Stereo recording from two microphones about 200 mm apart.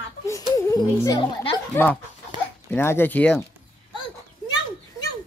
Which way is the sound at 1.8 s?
10° left (ahead or behind).